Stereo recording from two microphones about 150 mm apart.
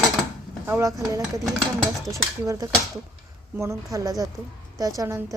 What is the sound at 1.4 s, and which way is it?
Speech, centre (ahead or behind).